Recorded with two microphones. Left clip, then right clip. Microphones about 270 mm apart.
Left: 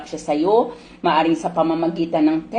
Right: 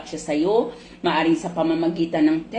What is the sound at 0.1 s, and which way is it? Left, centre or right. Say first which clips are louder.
Speech: left 4 dB; centre.